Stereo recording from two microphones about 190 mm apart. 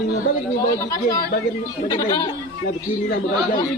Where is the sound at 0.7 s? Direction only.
20° left (ahead or behind).